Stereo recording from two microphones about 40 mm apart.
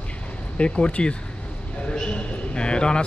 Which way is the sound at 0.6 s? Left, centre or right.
Left.